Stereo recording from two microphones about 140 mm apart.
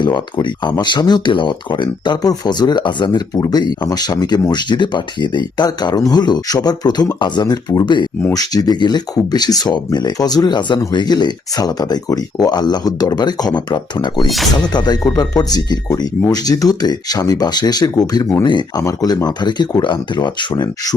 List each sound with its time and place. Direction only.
0.0 s speech: 30° left (ahead or behind)